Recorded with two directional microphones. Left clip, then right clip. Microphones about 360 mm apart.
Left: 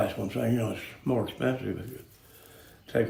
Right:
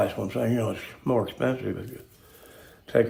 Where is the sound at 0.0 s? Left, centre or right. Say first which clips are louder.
Right 3 dB; centre.